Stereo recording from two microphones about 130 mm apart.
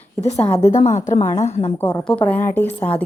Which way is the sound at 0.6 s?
70° left (ahead or behind).